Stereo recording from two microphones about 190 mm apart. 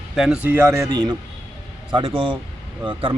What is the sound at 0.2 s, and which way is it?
Speech, 5° right (ahead or behind).